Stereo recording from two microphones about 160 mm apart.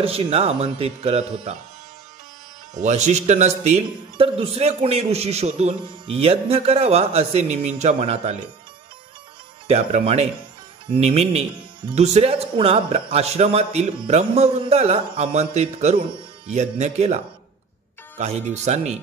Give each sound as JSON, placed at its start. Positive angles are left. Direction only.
{"t": 0.0, "sound": "speech", "side_deg": -35}
{"t": 2.7, "sound": "speech", "side_deg": -45}
{"t": 9.7, "sound": "speech", "side_deg": -45}